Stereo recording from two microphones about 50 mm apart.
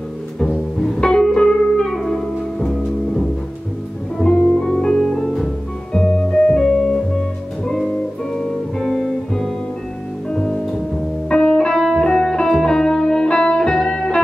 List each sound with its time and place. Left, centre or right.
0.7 s music: centre
1.9 s music: centre
4.2 s music: centre
8.4 s music: centre
10.3 s music: centre